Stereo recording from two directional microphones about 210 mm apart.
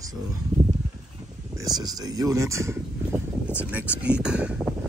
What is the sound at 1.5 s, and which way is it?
Speech, 20° right (ahead or behind).